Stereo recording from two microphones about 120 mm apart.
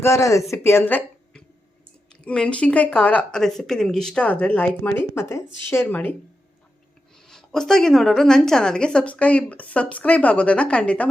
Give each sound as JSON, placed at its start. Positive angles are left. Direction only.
{"t": 0.0, "sound": "a woman's voice", "side_deg": 25}
{"t": 7.3, "sound": "a woman's voice", "side_deg": 5}